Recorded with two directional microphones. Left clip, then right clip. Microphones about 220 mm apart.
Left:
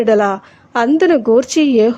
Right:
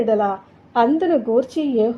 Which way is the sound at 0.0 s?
25° left (ahead or behind).